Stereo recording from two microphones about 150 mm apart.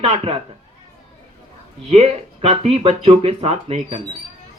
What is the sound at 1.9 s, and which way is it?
Speech, 45° right (ahead or behind).